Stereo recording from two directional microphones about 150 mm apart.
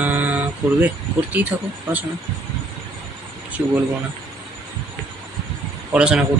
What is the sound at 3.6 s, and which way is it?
Speech, 15° right (ahead or behind).